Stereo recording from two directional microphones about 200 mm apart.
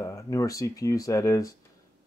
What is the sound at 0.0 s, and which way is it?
Speech, 15° left (ahead or behind).